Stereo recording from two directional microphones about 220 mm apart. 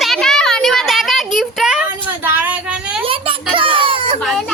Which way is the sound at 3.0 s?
25° right (ahead or behind).